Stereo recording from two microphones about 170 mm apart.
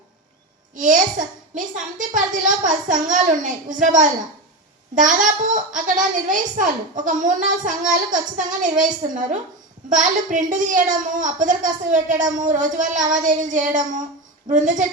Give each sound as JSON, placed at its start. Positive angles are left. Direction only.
{"t": 0.8, "sound": "a child's voice", "side_deg": -50}